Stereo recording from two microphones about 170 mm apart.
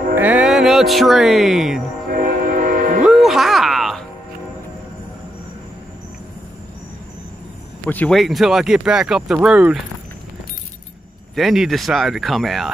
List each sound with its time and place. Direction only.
0.1 s speech: 10° right (ahead or behind)
2.0 s train: 55° right (ahead or behind)
3.0 s music: centre (ahead or behind)
7.8 s speech: 5° left (ahead or behind)
11.3 s speech: centre (ahead or behind)